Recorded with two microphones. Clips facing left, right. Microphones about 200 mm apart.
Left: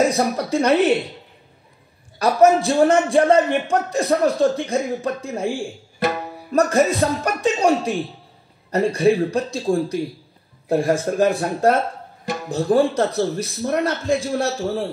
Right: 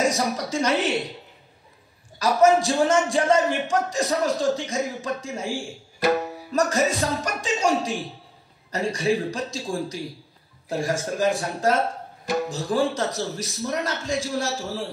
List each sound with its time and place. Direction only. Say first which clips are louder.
0.0 s a man's voice: left 5 dB; 55° left (ahead or behind)
2.1 s a man's voice: left 3 dB; 55° left (ahead or behind)